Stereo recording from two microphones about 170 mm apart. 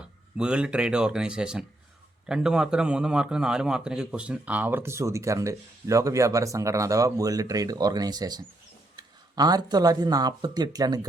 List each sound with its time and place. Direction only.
0.3 s a man's voice: 5° right (ahead or behind); by 11.0 s 20° right (ahead or behind)